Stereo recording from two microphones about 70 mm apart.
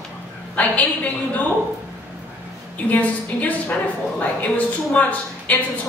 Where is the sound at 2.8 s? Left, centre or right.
Left.